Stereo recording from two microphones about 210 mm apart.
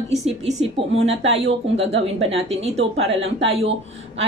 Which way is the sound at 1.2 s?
30° right (ahead or behind).